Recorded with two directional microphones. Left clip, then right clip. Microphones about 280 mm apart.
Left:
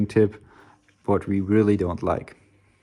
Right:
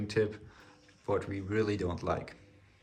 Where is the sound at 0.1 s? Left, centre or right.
Centre.